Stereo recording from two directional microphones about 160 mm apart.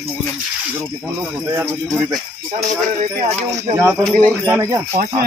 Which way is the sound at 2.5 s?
45° right (ahead or behind).